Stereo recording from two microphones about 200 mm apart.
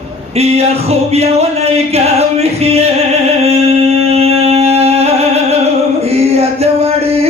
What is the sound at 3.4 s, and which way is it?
Singing, 30° right (ahead or behind).